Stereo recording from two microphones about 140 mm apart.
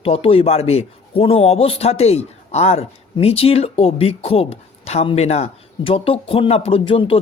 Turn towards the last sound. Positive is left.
turn(degrees=40)  # may be behind; listen again after turning